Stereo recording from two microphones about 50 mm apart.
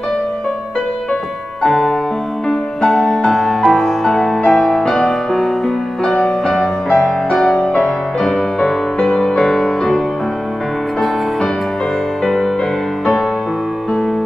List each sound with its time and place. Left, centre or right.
1.6 s music: centre
7.3 s music: centre
7.6 s music: centre
8.2 s music: centre